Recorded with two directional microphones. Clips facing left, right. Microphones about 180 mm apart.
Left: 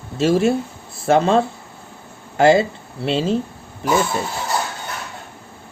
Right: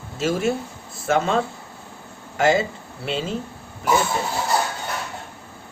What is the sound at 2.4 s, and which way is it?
Speech, 30° left (ahead or behind).